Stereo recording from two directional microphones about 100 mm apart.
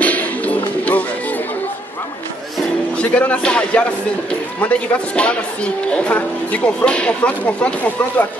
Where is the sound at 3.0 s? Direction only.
15° left (ahead or behind).